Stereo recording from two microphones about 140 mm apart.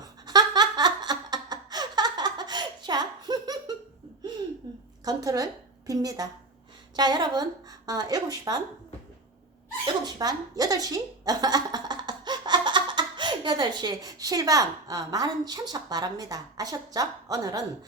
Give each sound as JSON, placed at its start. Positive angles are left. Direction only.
{"t": 0.0, "sound": "laughter", "side_deg": -30}
{"t": 5.0, "sound": "a woman's voice", "side_deg": -25}
{"t": 9.8, "sound": "a woman's voice", "side_deg": -30}